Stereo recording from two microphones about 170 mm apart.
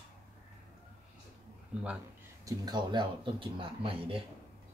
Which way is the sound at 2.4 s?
25° right (ahead or behind).